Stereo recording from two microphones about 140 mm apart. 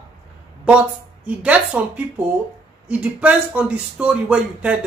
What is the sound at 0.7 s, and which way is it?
Speech, 10° right (ahead or behind).